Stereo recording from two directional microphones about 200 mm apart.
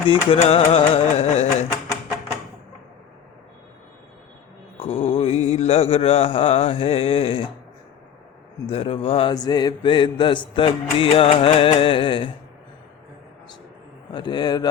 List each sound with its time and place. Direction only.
0.1 s music: 30° left (ahead or behind)
4.8 s mantra: 30° left (ahead or behind)
8.6 s mantra: 30° left (ahead or behind)
14.1 s mantra: 20° left (ahead or behind)